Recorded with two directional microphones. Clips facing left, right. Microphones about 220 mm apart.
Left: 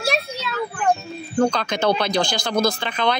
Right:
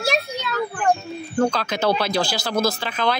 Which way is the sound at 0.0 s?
Centre (ahead or behind).